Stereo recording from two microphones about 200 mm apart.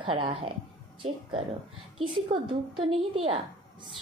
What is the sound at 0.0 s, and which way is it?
Speech, 25° right (ahead or behind).